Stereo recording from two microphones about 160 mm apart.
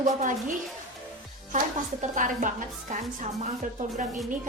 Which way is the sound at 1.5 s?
55° right (ahead or behind).